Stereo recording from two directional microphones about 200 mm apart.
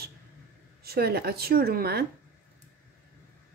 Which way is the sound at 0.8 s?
50° right (ahead or behind).